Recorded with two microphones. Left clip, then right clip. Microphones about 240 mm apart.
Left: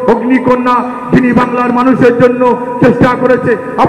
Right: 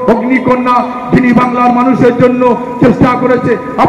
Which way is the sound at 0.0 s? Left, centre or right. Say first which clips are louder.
Even; left.